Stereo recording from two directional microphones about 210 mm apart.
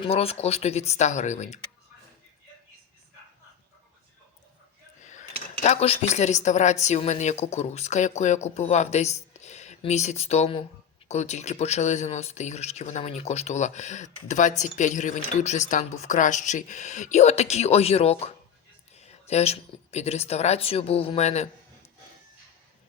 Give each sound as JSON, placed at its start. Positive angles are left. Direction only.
{"t": 0.0, "sound": "speech", "side_deg": 30}
{"t": 5.0, "sound": "speech", "side_deg": 35}